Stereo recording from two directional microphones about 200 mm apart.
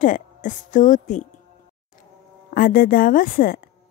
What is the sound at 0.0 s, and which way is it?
Speech, 40° left (ahead or behind).